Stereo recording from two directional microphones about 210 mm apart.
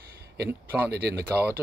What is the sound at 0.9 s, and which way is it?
Speech, 50° right (ahead or behind).